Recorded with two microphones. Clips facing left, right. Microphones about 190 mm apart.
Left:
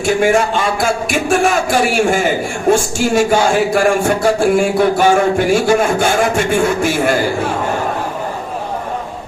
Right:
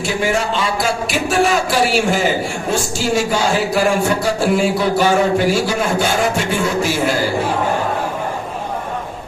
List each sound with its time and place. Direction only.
0.0 s speech: 50° left (ahead or behind)